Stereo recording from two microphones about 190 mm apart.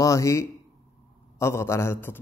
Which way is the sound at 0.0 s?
15° left (ahead or behind).